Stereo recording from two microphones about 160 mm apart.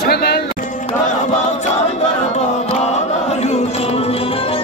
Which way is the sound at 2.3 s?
45° left (ahead or behind).